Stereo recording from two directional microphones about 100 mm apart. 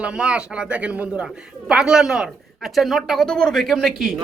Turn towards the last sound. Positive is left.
turn(degrees=0)  # may be behind; listen again after turning